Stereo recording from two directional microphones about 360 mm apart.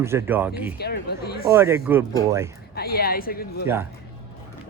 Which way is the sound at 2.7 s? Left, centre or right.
Left.